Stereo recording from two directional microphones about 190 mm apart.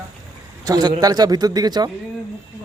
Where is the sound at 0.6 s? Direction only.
20° right (ahead or behind).